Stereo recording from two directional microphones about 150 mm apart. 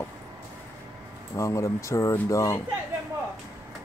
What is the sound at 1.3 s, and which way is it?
Speech, 20° left (ahead or behind).